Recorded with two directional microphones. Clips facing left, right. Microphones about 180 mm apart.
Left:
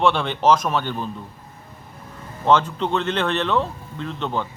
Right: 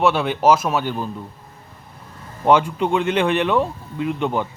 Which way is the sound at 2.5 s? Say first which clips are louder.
Right 2 dB; 10° right (ahead or behind).